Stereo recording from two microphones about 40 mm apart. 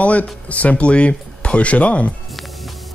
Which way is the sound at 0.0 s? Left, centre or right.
Left.